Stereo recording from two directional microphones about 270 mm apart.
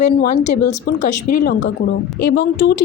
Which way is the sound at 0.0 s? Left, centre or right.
Left.